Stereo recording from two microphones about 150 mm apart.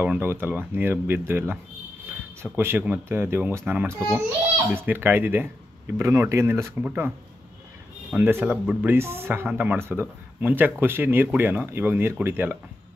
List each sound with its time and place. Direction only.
0.0 s speech: 10° right (ahead or behind)